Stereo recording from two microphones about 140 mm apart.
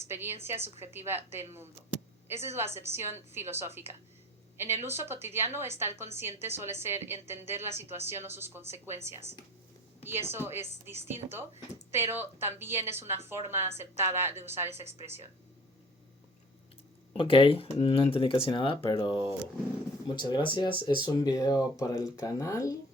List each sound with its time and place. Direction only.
0.1 s a woman's voice: 15° right (ahead or behind)
17.2 s speech: 35° left (ahead or behind)
20.1 s speech: 35° left (ahead or behind)